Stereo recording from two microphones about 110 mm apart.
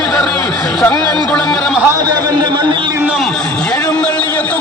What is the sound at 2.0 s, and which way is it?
Speech, 40° right (ahead or behind).